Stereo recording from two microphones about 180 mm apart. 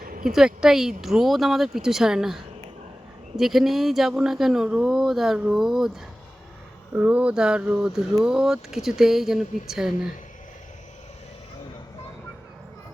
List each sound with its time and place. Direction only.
0.0 s a sound: 50° right (ahead or behind)
0.3 s speech: 5° right (ahead or behind)
6.9 s speech: 10° right (ahead or behind)